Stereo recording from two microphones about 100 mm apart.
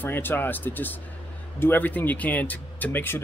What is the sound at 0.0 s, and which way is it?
Speech, 20° left (ahead or behind).